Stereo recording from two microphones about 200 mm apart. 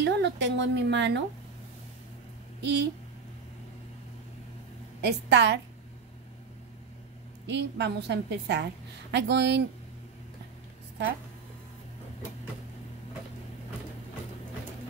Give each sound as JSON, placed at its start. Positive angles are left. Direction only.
{"t": 0.0, "sound": "speech", "side_deg": -60}
{"t": 2.6, "sound": "speech", "side_deg": -60}
{"t": 5.0, "sound": "speech", "side_deg": -60}
{"t": 7.4, "sound": "speech", "side_deg": -60}